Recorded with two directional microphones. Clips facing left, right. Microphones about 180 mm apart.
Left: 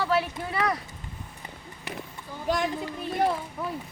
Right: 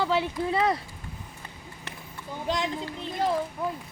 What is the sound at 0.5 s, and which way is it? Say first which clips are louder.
Speech: right 2 dB; 25° right (ahead or behind).